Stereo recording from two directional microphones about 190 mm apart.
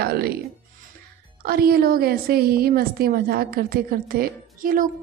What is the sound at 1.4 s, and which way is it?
A woman's voice, 55° right (ahead or behind).